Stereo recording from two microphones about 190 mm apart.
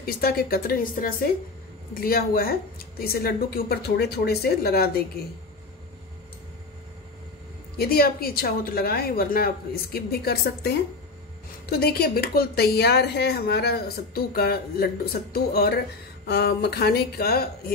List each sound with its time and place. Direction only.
0.0 s a woman's voice: 55° left (ahead or behind)
7.7 s a woman's voice: 55° left (ahead or behind)